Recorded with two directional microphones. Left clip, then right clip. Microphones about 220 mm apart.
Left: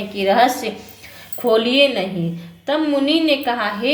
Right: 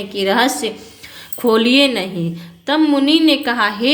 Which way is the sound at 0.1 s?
25° right (ahead or behind).